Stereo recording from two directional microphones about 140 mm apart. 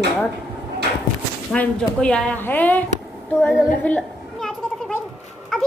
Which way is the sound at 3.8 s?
5° left (ahead or behind).